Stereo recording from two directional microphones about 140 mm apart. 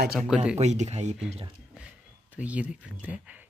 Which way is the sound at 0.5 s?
55° right (ahead or behind).